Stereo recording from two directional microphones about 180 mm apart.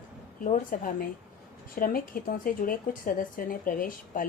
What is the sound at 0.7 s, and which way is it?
A woman's voice, 50° left (ahead or behind).